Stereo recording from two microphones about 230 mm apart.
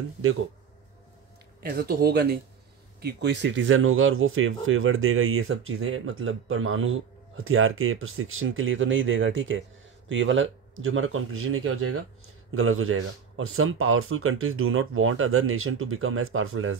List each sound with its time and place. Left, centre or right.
0.2 s speech: right
1.6 s speech: right